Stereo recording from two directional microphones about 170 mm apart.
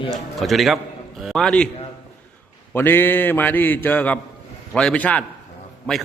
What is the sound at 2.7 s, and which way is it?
A man's voice, 10° left (ahead or behind).